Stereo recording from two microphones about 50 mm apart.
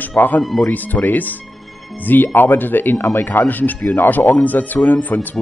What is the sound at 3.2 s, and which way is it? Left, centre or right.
Speech, left.